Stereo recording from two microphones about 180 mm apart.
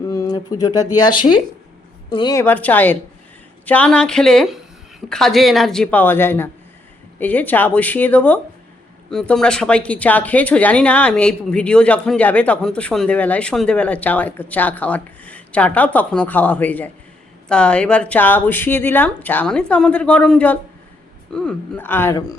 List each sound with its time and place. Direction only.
0.1 s a sound: 20° left (ahead or behind)
0.9 s speech: 25° left (ahead or behind)
2.4 s speech: 10° left (ahead or behind)